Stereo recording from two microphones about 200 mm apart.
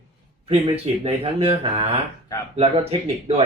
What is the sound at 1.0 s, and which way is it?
Speech, 30° right (ahead or behind).